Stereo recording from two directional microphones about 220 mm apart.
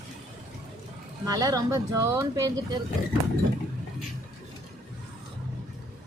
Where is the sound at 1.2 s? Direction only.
15° right (ahead or behind).